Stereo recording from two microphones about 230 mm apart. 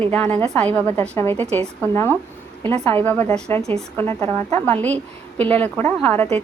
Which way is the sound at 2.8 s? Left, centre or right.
Centre.